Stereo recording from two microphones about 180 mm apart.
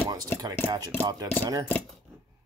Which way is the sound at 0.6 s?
30° left (ahead or behind).